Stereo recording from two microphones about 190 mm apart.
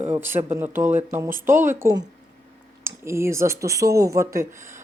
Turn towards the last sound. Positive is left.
turn(degrees=-15)  # may be behind; listen again after turning